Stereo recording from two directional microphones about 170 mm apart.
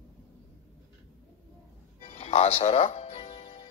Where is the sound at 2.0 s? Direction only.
35° left (ahead or behind).